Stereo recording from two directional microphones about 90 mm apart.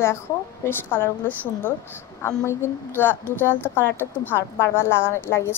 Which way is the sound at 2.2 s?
30° left (ahead or behind).